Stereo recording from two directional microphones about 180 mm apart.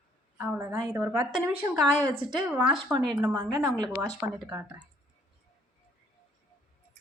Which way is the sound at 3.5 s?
15° right (ahead or behind).